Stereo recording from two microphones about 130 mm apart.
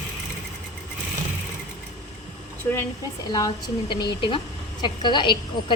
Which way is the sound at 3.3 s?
30° left (ahead or behind).